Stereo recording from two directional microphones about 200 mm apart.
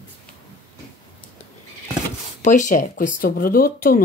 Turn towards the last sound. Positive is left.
turn(degrees=45)  # may be behind; listen again after turning